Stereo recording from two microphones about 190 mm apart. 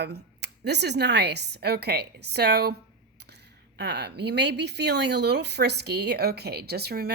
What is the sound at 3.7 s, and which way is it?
Speech, 60° right (ahead or behind).